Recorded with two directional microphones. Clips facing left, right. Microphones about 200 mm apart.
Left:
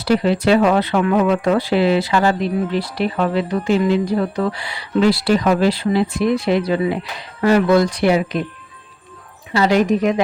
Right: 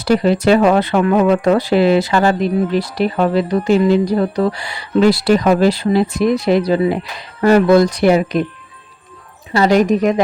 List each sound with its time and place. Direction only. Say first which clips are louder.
0.0 s speech: right 3 dB; 45° right (ahead or behind)
9.5 s speech: right 3 dB; 45° right (ahead or behind)